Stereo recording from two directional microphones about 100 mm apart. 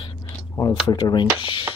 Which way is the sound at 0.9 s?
45° left (ahead or behind).